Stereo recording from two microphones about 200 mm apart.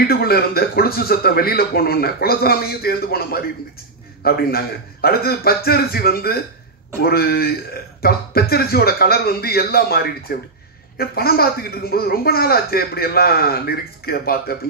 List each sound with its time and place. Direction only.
0.0 s a man's voice: 50° left (ahead or behind)